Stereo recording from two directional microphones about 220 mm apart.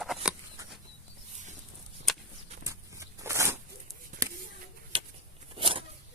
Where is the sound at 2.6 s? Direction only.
15° right (ahead or behind).